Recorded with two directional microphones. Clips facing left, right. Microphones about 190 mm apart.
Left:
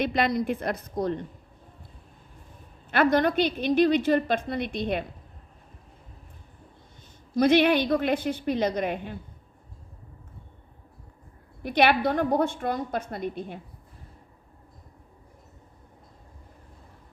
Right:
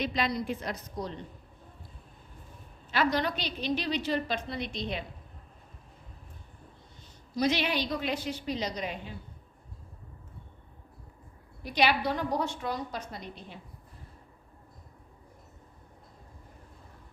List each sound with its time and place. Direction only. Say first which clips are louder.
0.0 s a woman's voice: left 6 dB; 55° left (ahead or behind)
2.9 s a woman's voice: left 7 dB; 55° left (ahead or behind)
7.3 s a woman's voice: left 9 dB; 55° left (ahead or behind)
11.6 s a woman's voice: left 5 dB; 55° left (ahead or behind)